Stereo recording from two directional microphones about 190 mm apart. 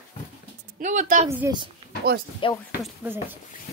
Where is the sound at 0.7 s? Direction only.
45° right (ahead or behind).